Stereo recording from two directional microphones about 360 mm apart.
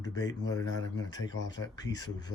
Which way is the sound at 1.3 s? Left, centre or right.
Left.